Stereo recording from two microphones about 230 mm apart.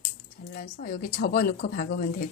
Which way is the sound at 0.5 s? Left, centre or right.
Left.